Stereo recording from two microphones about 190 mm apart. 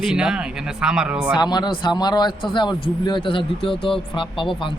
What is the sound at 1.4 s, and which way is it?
Speech, 25° left (ahead or behind).